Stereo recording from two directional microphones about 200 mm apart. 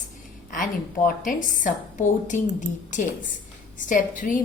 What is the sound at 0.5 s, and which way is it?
A woman's voice, 40° left (ahead or behind).